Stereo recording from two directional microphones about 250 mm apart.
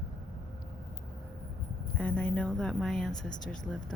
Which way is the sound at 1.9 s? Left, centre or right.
Centre.